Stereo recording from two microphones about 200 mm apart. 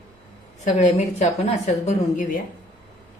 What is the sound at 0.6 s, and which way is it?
A woman's voice, 35° left (ahead or behind).